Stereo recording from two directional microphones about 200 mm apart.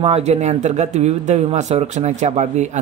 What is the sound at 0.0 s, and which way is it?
Speech, 30° right (ahead or behind).